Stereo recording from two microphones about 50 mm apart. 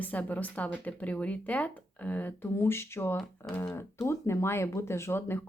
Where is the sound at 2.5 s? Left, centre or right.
Left.